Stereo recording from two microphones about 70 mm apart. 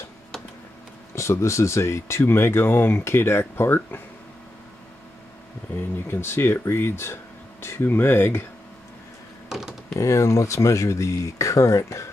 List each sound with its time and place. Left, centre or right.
1.1 s speech: left
5.8 s speech: left
9.5 s computer keyboard: centre
9.9 s speech: left